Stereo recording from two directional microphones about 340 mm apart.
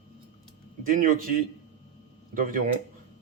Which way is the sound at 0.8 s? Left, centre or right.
Right.